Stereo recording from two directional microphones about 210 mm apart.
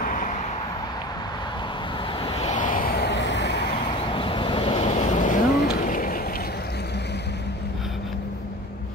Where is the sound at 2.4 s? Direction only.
35° left (ahead or behind); by 3.6 s 55° left (ahead or behind).